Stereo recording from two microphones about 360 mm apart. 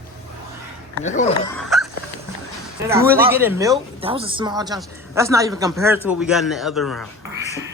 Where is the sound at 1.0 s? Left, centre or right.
Centre.